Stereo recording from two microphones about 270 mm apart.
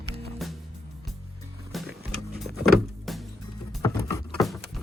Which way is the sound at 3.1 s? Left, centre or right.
Centre.